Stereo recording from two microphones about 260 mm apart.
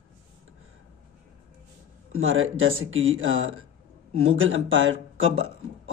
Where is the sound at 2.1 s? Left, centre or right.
Right.